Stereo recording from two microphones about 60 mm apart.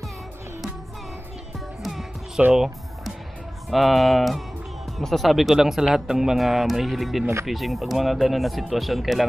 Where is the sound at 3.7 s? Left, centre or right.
Centre.